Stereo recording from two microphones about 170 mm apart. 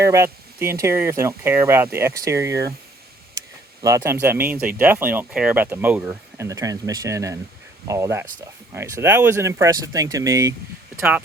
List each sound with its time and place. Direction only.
0.0 s speech: 15° right (ahead or behind)
3.8 s speech: 15° right (ahead or behind)